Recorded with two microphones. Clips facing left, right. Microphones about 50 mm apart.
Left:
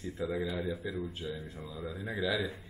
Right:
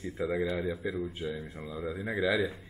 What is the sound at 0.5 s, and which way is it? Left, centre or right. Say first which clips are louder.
Mantra: right 3 dB; centre.